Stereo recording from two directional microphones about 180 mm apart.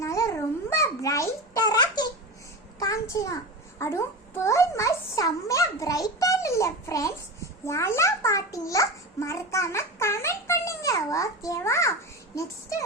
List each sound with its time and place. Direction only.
0.0 s babbling: 15° left (ahead or behind)
0.7 s a sound: 15° left (ahead or behind)
2.7 s a child's voice: 20° left (ahead or behind)